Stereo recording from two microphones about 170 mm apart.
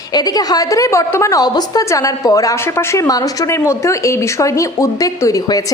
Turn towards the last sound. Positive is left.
turn(degrees=20)  # may be behind; listen again after turning